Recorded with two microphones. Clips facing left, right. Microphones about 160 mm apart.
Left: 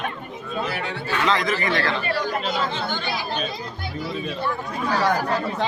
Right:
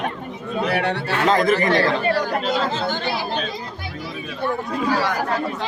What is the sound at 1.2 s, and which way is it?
Speech, 50° right (ahead or behind).